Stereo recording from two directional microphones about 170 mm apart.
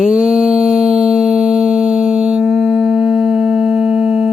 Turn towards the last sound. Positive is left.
turn(degrees=-5)  # may be behind; listen again after turning